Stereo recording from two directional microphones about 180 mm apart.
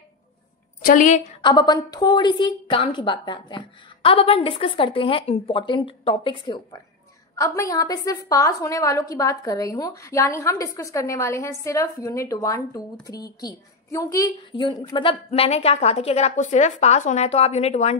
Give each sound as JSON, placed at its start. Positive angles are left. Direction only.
{"t": 0.8, "sound": "a woman's voice", "side_deg": 45}
{"t": 1.4, "sound": "a woman's voice", "side_deg": 25}